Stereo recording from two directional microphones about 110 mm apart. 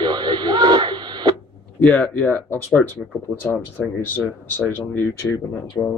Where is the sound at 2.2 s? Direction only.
15° left (ahead or behind).